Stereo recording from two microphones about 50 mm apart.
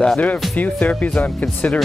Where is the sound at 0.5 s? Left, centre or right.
Left.